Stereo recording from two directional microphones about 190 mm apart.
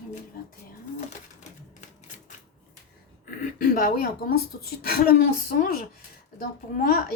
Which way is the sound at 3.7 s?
50° left (ahead or behind).